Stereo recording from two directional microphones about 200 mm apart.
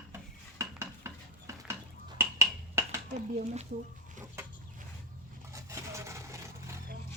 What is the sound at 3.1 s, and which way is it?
Speech, 35° right (ahead or behind).